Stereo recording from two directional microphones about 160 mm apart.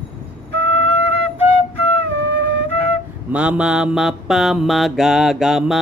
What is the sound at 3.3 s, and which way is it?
Speech, 5° right (ahead or behind).